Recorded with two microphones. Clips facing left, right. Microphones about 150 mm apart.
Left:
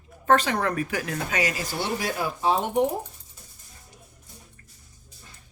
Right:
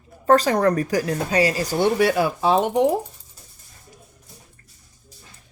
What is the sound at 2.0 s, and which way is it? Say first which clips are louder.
Speech: right 8 dB; 75° right (ahead or behind).